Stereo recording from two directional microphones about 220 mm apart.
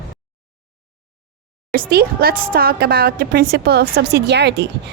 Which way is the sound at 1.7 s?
45° right (ahead or behind).